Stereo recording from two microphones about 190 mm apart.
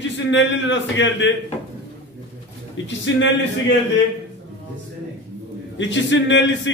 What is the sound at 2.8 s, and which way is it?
Speech, 75° left (ahead or behind).